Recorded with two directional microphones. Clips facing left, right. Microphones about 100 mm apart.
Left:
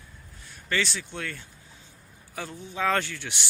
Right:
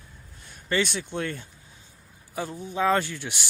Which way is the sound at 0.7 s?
20° right (ahead or behind).